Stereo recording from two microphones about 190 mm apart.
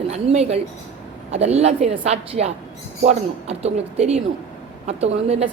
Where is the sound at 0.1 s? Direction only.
35° right (ahead or behind).